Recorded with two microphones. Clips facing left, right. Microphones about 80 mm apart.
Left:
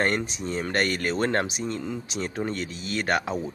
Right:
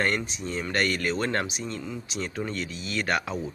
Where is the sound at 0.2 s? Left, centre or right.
Left.